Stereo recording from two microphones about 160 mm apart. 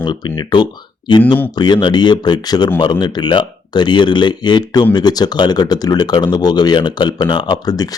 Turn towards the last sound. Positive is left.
turn(degrees=25)  # may be behind; listen again after turning